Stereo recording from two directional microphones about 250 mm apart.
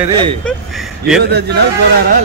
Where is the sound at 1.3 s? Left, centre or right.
Right.